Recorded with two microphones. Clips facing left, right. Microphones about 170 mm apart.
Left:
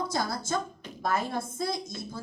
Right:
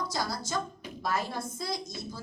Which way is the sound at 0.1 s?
55° left (ahead or behind).